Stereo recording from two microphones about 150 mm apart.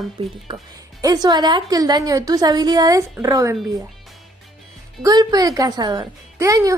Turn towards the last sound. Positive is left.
turn(degrees=-20)  # may be behind; listen again after turning